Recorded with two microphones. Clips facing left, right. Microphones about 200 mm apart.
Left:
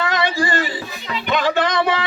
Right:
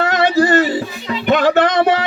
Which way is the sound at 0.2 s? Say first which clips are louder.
Right 8 dB; 65° right (ahead or behind).